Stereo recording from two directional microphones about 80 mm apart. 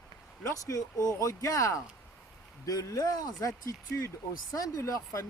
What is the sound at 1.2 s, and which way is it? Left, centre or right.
Speech, left.